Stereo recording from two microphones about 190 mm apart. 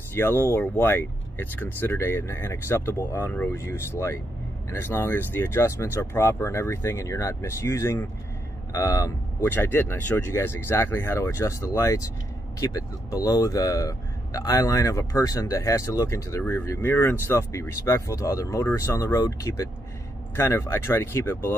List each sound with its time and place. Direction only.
0.1 s speech: 10° left (ahead or behind)